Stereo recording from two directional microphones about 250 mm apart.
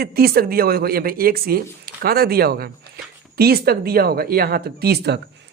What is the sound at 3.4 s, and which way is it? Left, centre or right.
Speech, right.